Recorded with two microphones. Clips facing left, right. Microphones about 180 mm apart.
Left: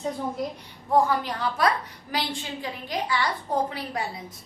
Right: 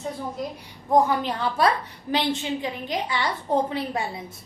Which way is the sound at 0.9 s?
20° right (ahead or behind).